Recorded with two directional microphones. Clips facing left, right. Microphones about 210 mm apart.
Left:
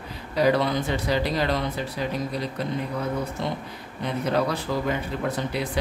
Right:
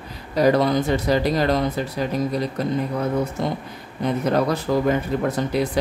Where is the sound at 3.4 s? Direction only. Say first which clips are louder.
Right 4 dB; 45° right (ahead or behind).